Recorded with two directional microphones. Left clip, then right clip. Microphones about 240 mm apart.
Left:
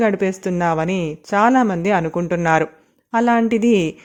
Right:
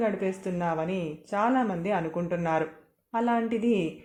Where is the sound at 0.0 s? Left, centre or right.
Left.